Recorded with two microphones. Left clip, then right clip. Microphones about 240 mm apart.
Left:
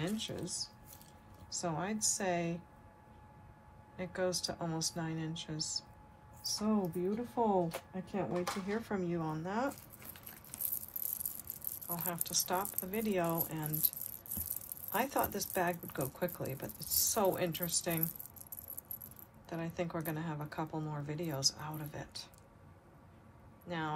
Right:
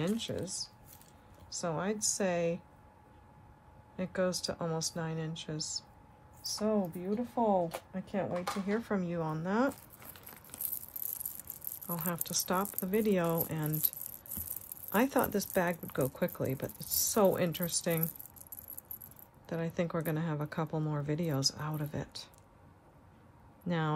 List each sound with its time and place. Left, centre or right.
0.0 s speech: right
3.9 s speech: right
12.2 s speech: right
15.0 s speech: right
19.4 s speech: right